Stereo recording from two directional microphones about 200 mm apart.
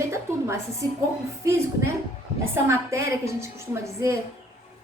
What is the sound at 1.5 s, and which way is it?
A woman's voice, 15° right (ahead or behind).